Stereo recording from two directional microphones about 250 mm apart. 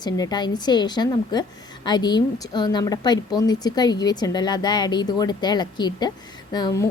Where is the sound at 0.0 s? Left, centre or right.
Centre.